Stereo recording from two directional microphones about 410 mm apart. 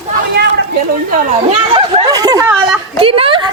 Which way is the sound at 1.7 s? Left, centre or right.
Centre.